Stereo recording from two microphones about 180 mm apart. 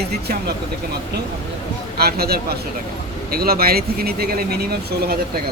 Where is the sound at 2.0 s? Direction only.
60° right (ahead or behind).